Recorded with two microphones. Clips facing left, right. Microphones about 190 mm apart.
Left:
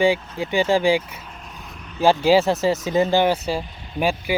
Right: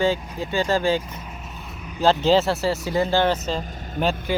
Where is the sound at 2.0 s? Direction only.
10° left (ahead or behind).